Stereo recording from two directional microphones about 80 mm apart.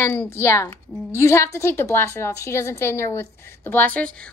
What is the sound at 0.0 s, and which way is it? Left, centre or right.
Speech, left.